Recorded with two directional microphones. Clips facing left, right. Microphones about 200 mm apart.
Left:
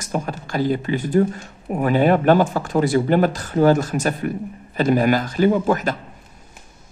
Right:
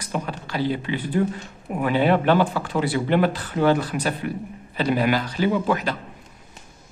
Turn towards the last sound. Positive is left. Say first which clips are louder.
# left 4 dB
turn(degrees=45)  # may be behind; listen again after turning